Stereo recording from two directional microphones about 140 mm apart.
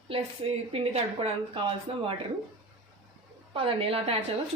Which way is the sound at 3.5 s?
40° right (ahead or behind).